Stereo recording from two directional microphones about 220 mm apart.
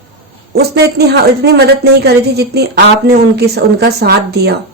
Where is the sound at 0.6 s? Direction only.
45° right (ahead or behind).